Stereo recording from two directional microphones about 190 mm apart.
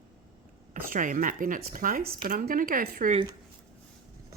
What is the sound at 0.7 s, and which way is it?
Speech, 45° right (ahead or behind).